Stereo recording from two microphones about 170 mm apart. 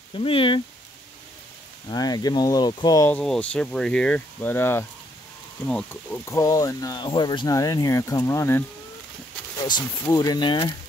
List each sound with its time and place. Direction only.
0.1 s speech: 30° left (ahead or behind)
1.9 s speech: 25° left (ahead or behind)
3.1 s speech: 5° left (ahead or behind)
9.7 s speech: 20° left (ahead or behind)